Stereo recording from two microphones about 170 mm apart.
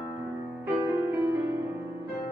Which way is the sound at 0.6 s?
15° right (ahead or behind).